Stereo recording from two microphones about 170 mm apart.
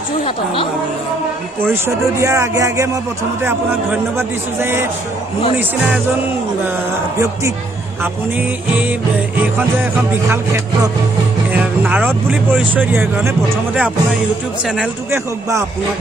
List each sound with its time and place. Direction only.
1.6 s a man's voice: 15° right (ahead or behind)
10.3 s a man's voice: 15° right (ahead or behind)
14.8 s a man's voice: 15° right (ahead or behind)